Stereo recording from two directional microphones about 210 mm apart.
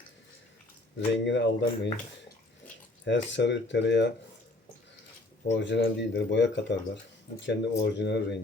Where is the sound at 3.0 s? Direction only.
60° left (ahead or behind).